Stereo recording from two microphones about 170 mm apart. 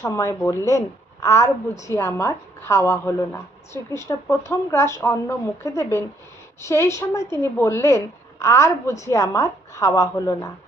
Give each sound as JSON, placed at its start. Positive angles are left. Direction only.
{"t": 0.0, "sound": "a woman's voice", "side_deg": 15}